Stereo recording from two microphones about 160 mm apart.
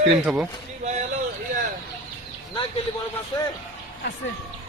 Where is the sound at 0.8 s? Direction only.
45° right (ahead or behind).